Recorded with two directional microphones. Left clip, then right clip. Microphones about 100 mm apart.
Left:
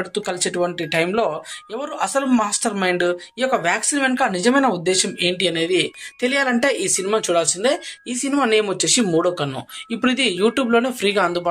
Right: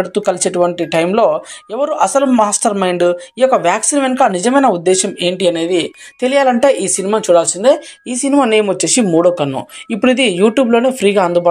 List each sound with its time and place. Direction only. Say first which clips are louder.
0.0 s speech: right 9 dB; 40° right (ahead or behind)